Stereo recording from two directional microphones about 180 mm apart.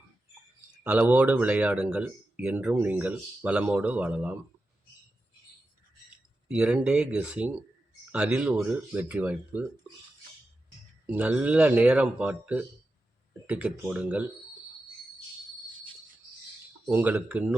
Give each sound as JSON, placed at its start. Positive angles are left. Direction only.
{"t": 0.9, "sound": "speech", "side_deg": -10}
{"t": 6.5, "sound": "speech", "side_deg": -5}
{"t": 11.0, "sound": "speech", "side_deg": -10}
{"t": 16.9, "sound": "speech", "side_deg": -10}